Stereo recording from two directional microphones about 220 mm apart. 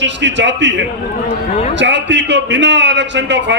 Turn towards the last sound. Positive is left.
turn(degrees=-50)  # may be behind; listen again after turning